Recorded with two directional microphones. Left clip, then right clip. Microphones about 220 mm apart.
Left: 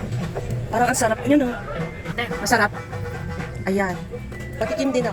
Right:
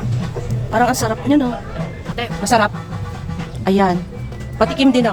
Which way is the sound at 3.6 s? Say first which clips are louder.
Right 8 dB; 15° right (ahead or behind).